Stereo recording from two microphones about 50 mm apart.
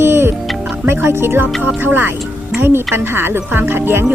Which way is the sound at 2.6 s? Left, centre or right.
Right.